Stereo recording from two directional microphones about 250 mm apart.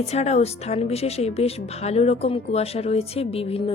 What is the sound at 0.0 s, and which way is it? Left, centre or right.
Speech, left.